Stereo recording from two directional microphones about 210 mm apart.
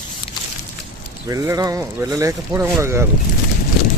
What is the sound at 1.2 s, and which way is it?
Speech, 15° right (ahead or behind).